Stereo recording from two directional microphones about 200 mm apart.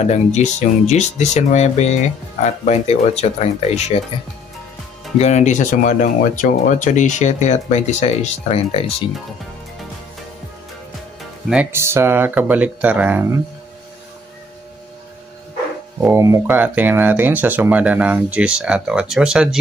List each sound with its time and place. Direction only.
0.0 s speech: 35° left (ahead or behind)
5.2 s speech: 35° left (ahead or behind)
11.4 s speech: 10° right (ahead or behind)
16.0 s speech: 10° right (ahead or behind)